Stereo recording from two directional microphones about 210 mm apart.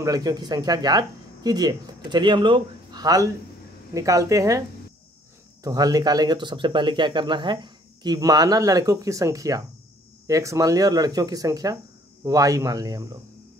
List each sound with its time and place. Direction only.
0.0 s speech: 15° right (ahead or behind)